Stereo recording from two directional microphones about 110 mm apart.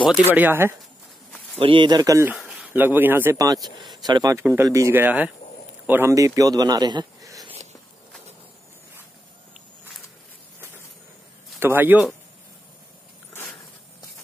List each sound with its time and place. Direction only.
0.2 s speech: 15° right (ahead or behind)
1.6 s speech: 50° right (ahead or behind); by 2.2 s 35° right (ahead or behind)
2.7 s speech: 15° right (ahead or behind)
3.3 s speech: 35° right (ahead or behind)
4.4 s speech: 20° right (ahead or behind)
5.0 s speech: 15° right (ahead or behind)
6.1 s speech: 30° right (ahead or behind)
11.6 s speech: 20° right (ahead or behind)